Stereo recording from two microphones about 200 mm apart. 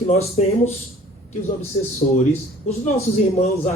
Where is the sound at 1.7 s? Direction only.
30° left (ahead or behind).